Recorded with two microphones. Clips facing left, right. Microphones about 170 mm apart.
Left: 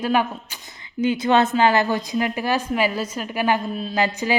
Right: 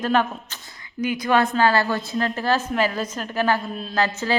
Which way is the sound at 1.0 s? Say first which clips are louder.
Left 2 dB; 25° left (ahead or behind).